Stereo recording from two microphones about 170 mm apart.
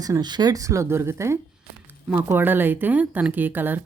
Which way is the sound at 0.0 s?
25° right (ahead or behind).